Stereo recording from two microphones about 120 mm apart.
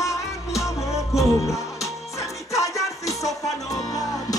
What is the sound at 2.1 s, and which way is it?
Music, 25° left (ahead or behind).